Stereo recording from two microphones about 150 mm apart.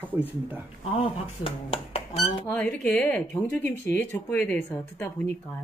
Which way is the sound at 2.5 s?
10° left (ahead or behind).